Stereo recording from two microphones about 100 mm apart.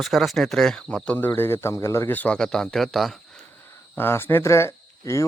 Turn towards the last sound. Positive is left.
turn(degrees=30)  # may be behind; listen again after turning